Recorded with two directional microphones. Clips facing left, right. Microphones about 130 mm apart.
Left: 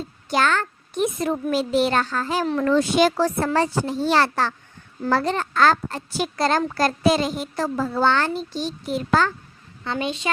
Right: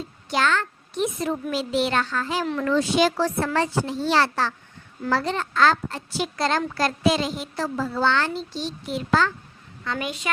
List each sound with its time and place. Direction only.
0.3 s a child's voice: 45° left (ahead or behind)
2.7 s a child's voice: 50° left (ahead or behind)
9.8 s a woman's voice: 30° left (ahead or behind)